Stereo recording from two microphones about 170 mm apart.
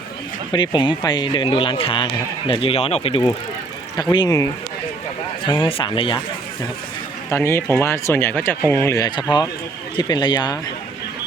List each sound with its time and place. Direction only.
0.5 s speech: 25° left (ahead or behind)
3.9 s speech: 25° left (ahead or behind)
5.6 s speech: 30° left (ahead or behind)
7.3 s speech: 15° left (ahead or behind)